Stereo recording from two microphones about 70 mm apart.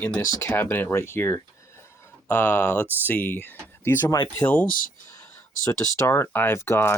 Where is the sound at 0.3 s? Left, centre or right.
Left.